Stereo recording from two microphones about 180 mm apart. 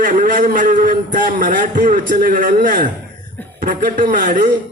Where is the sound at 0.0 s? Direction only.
45° right (ahead or behind).